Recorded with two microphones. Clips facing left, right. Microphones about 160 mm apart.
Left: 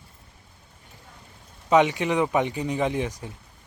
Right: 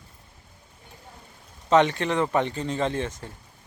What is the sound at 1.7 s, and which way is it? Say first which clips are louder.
Speech: even; 10° left (ahead or behind).